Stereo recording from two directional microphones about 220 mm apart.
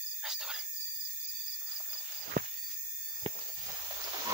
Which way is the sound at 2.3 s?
35° right (ahead or behind).